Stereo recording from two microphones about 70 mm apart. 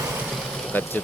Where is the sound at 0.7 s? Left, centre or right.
Left.